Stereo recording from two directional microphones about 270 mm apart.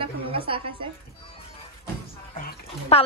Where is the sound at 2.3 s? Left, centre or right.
Left.